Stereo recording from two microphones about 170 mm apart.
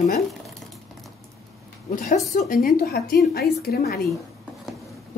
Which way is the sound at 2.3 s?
60° left (ahead or behind).